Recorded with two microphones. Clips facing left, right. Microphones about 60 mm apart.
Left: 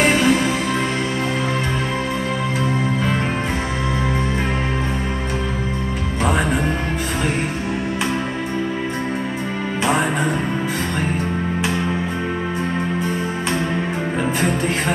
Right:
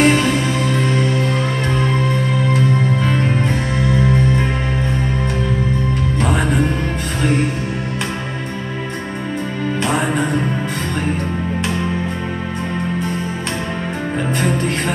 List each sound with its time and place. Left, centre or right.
0.0 s music: centre
6.2 s music: centre
9.8 s music: centre